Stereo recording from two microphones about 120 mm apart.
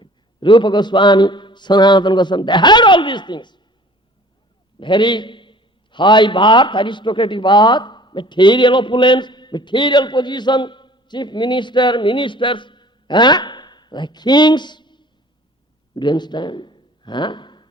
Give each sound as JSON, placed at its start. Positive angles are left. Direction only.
{"t": 0.0, "sound": "a man's voice", "side_deg": 40}
{"t": 4.8, "sound": "a man's voice", "side_deg": 40}